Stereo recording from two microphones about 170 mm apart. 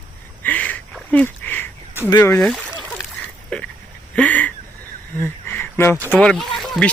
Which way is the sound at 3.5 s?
5° left (ahead or behind).